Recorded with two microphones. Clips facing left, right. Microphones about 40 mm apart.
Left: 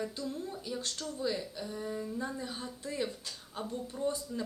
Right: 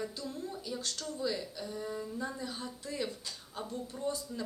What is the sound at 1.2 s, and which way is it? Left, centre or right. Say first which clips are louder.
A woman's voice: left 1 dB; centre.